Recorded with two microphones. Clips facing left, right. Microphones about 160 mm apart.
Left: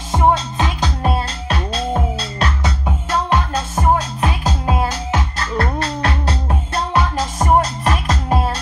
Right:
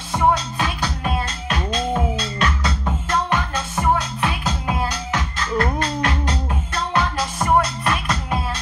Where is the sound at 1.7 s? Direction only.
35° left (ahead or behind).